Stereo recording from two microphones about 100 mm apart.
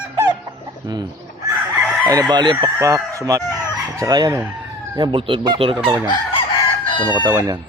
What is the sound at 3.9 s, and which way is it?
Chicken, 40° right (ahead or behind).